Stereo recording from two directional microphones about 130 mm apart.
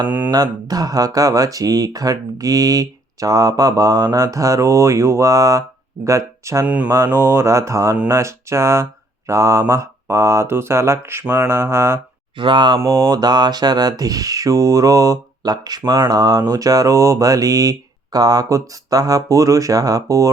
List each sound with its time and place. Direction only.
0.3 s speech: 30° right (ahead or behind)
12.4 s speech: 40° right (ahead or behind)